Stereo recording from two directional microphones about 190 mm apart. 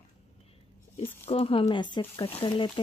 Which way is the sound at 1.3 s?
30° left (ahead or behind).